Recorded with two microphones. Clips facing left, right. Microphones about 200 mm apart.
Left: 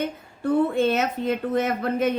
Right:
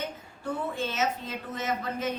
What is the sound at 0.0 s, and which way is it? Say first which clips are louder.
Speech: left 8 dB; 60° left (ahead or behind).